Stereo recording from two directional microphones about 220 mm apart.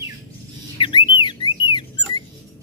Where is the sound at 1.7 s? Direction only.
20° left (ahead or behind).